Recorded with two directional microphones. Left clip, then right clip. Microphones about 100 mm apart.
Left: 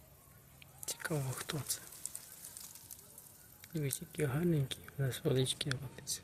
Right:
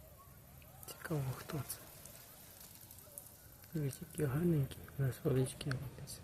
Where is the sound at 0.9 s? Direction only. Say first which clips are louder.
Left 4 dB; 20° left (ahead or behind).